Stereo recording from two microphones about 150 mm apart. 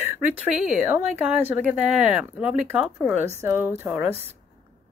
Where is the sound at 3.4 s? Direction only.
15° right (ahead or behind).